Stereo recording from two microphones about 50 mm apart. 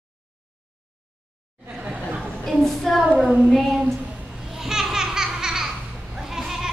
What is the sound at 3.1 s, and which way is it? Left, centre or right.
Child singing, right.